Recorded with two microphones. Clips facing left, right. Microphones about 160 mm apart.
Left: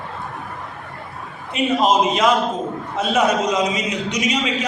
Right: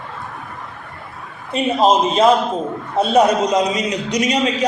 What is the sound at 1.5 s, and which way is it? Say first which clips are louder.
A man's voice: right 2 dB; 30° right (ahead or behind).